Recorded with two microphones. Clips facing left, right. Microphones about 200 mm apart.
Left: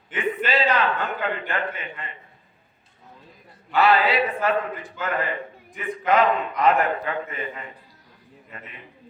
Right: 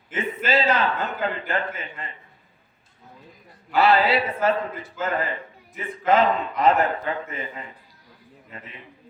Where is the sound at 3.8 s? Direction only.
30° right (ahead or behind).